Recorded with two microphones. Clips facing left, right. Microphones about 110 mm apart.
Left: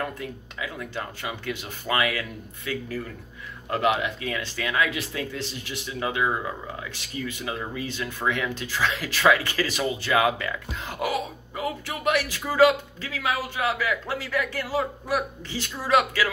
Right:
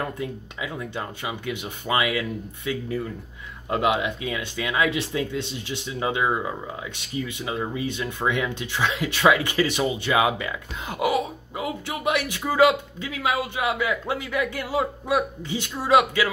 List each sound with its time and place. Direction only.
0.2 s speech: 20° right (ahead or behind)
7.3 s speech: 20° right (ahead or behind)